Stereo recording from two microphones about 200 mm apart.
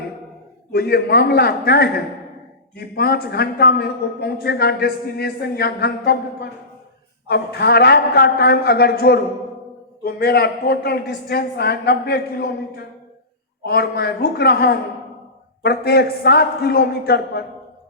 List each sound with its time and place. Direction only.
0.7 s a man's voice: 55° left (ahead or behind)